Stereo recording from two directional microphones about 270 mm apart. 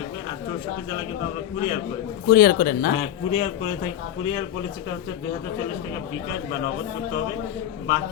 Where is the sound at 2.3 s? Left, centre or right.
Left.